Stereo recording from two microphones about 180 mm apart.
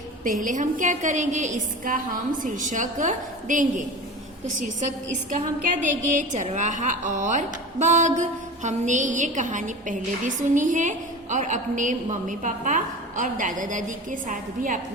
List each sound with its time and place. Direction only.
0.4 s a woman's voice: 45° right (ahead or behind)